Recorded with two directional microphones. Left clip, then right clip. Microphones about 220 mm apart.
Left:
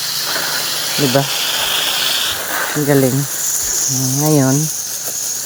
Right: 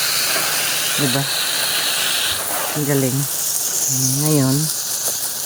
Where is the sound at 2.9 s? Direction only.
10° left (ahead or behind).